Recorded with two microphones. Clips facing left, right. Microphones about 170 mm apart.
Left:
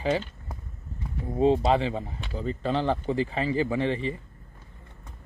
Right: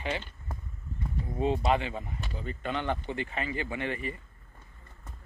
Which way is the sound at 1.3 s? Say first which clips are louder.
Left 6 dB; 30° left (ahead or behind).